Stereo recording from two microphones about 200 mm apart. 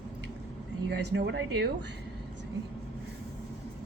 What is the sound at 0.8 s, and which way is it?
Speech, 55° right (ahead or behind).